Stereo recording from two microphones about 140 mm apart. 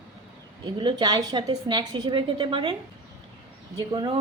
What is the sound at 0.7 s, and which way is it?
A woman's voice, 30° right (ahead or behind).